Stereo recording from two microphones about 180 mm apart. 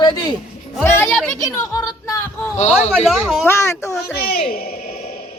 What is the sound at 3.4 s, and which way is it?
Speech, 15° left (ahead or behind).